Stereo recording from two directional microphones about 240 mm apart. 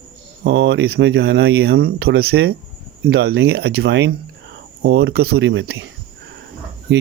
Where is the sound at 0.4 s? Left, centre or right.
Right.